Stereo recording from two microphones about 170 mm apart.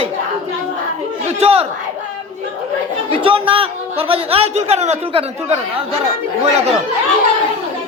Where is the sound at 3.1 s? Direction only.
30° right (ahead or behind).